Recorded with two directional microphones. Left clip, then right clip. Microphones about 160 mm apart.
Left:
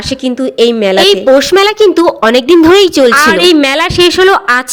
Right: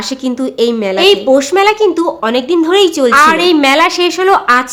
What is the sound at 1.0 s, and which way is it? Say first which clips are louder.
A woman's voice: left 1 dB; 30° left (ahead or behind).